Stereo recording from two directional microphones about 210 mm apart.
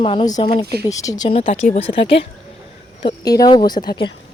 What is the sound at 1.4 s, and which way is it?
Speech, 35° left (ahead or behind).